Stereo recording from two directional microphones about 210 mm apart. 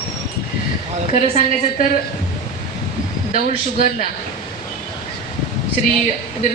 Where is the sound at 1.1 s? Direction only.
35° left (ahead or behind).